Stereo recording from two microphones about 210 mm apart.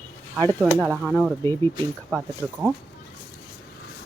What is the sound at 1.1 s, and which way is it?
Speech, 5° left (ahead or behind).